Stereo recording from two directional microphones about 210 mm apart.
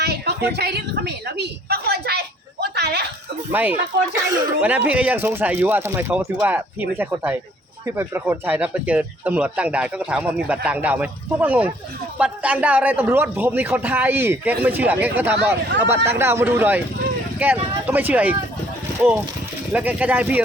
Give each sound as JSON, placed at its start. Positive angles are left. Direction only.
{"t": 0.0, "sound": "a sound", "side_deg": -50}
{"t": 3.5, "sound": "speech", "side_deg": -10}
{"t": 19.7, "sound": "speech", "side_deg": -5}